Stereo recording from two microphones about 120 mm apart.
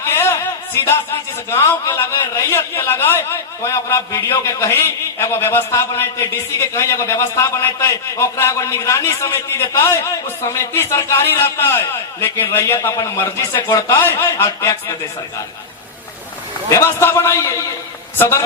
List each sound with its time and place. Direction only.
0.0 s speech: 20° left (ahead or behind)
16.7 s speech: 20° left (ahead or behind)